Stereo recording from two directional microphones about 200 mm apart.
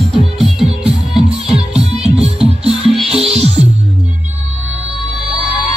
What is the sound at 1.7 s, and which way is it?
Music, 30° right (ahead or behind).